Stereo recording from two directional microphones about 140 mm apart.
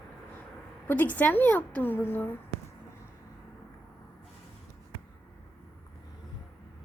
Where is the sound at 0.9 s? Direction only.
15° left (ahead or behind).